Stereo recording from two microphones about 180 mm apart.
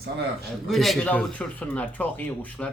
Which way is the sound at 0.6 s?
Centre (ahead or behind).